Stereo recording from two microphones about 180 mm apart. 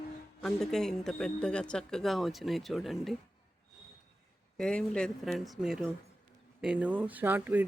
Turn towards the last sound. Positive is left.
turn(degrees=-10)  # may be behind; listen again after turning